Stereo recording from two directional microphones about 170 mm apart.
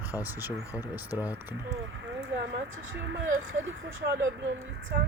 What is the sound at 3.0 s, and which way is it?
Speech, 90° right.